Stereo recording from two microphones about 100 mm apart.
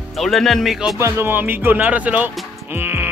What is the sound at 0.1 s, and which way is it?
Speech, centre (ahead or behind).